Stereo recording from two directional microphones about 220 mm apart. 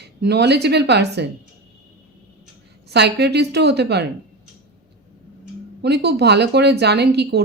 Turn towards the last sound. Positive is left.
turn(degrees=-50)  # may be behind; listen again after turning